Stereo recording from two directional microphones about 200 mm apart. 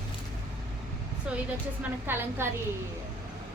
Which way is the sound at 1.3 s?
5° right (ahead or behind).